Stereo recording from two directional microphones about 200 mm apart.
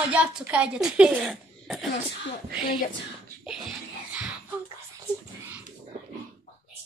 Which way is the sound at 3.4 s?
5° right (ahead or behind).